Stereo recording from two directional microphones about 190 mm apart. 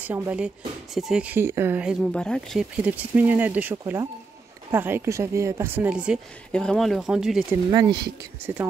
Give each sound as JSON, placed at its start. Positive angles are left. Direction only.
{"t": 0.1, "sound": "speech", "side_deg": -5}
{"t": 2.8, "sound": "speech", "side_deg": -10}
{"t": 7.7, "sound": "speech", "side_deg": -25}